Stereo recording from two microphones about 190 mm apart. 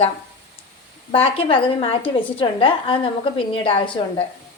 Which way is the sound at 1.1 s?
30° left (ahead or behind).